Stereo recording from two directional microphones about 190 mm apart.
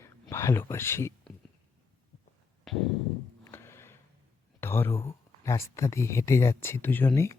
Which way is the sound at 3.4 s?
15° left (ahead or behind).